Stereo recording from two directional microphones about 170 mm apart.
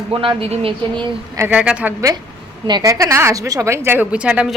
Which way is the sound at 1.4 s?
10° right (ahead or behind).